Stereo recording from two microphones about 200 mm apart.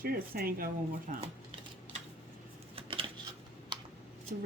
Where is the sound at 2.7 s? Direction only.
25° right (ahead or behind).